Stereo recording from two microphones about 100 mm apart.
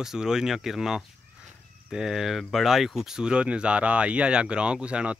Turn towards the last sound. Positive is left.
turn(degrees=-10)  # may be behind; listen again after turning